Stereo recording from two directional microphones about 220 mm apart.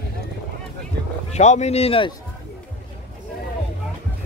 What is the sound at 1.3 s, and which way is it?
Speech, 30° left (ahead or behind).